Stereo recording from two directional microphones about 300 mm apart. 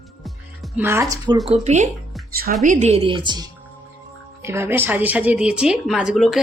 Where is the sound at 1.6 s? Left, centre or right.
Right.